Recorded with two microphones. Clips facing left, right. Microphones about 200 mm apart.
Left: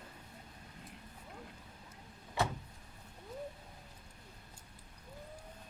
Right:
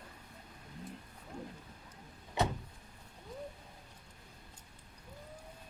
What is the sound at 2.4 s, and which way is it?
Vehicle, 20° right (ahead or behind).